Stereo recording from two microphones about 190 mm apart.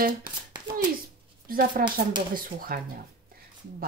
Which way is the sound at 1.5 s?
50° right (ahead or behind).